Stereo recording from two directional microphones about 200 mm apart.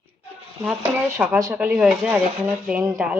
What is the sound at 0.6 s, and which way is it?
A woman's voice, 10° right (ahead or behind).